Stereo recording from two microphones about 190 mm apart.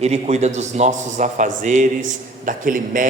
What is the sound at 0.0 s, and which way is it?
A man's voice, 35° right (ahead or behind).